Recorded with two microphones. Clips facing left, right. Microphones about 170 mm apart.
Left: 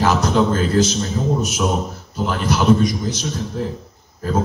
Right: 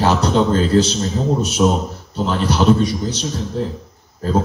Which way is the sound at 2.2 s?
30° right (ahead or behind).